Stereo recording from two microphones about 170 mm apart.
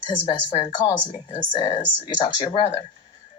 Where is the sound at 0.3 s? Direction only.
30° left (ahead or behind).